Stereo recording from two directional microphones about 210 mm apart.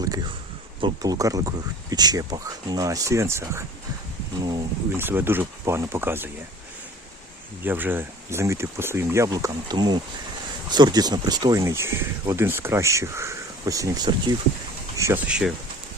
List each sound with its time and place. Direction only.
0.0 s a sound: 20° right (ahead or behind)
0.8 s speech: 20° right (ahead or behind)
7.6 s speech: 10° right (ahead or behind)